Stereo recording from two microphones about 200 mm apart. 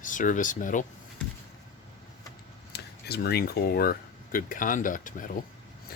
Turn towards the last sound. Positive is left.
turn(degrees=40)  # may be behind; listen again after turning